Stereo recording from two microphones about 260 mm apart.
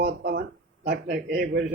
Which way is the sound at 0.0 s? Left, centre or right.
Right.